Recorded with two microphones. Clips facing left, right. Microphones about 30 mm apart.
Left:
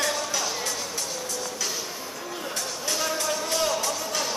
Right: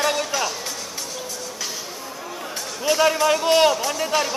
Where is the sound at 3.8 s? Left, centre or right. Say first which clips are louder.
Right 6 dB; right.